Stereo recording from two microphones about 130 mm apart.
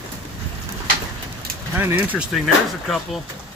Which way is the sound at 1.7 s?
15° right (ahead or behind).